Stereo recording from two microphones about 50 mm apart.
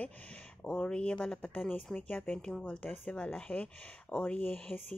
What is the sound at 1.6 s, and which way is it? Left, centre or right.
Speech, centre.